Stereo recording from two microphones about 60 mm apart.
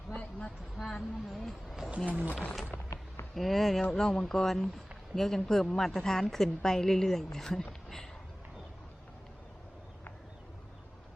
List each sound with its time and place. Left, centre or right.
0.2 s a sound: centre
0.8 s speech: centre
2.0 s speech: right
3.3 s a woman's voice: centre